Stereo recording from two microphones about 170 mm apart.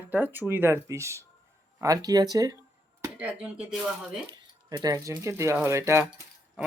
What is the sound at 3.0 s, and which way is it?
Speech, 10° right (ahead or behind).